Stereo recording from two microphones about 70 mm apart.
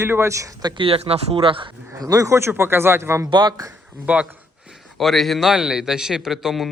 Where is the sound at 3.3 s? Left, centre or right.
Right.